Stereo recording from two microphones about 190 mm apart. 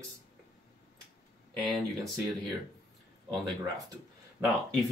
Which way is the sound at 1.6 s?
5° left (ahead or behind).